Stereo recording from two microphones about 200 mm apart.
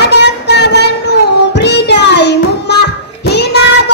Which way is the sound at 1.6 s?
55° left (ahead or behind).